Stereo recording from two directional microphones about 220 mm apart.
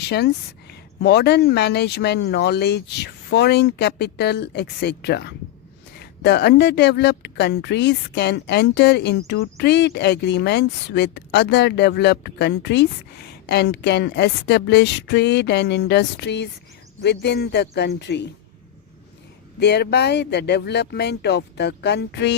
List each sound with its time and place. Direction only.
0.0 s speech: 50° left (ahead or behind)
19.5 s speech: 50° left (ahead or behind)